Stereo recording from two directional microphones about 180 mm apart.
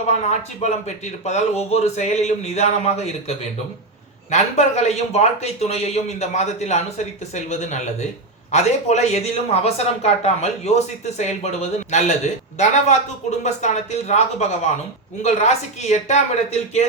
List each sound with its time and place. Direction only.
0.1 s speech: 40° left (ahead or behind)